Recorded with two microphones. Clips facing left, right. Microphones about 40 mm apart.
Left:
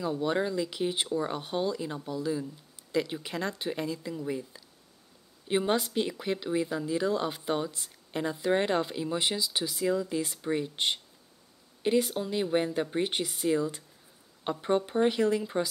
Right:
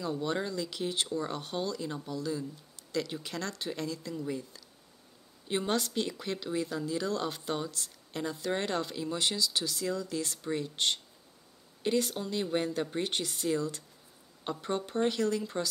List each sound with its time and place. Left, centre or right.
0.0 s speech: centre